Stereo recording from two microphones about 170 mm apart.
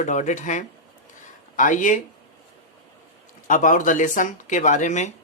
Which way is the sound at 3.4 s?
50° left (ahead or behind).